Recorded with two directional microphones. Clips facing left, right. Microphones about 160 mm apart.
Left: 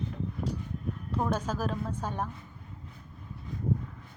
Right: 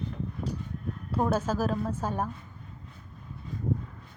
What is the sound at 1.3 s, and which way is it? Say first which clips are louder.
Speech: right 4 dB; 10° right (ahead or behind).